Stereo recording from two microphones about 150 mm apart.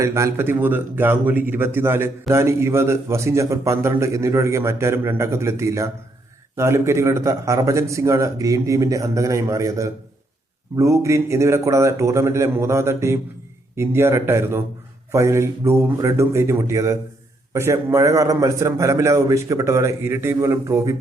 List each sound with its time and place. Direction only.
0.0 s a man's voice: 20° right (ahead or behind)